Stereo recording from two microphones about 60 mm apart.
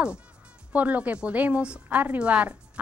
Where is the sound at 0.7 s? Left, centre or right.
Right.